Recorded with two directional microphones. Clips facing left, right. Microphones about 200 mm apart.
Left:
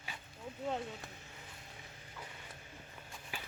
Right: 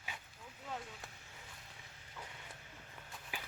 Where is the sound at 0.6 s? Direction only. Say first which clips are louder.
Left 8 dB; 25° left (ahead or behind).